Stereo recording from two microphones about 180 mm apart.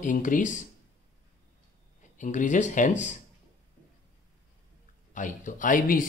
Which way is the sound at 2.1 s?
45° left (ahead or behind).